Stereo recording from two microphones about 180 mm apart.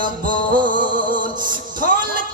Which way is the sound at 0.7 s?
50° right (ahead or behind).